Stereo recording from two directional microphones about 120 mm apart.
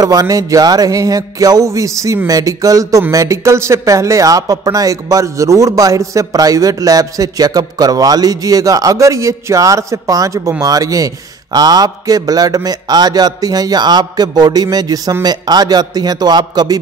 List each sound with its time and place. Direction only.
0.0 s a man's voice: 30° right (ahead or behind)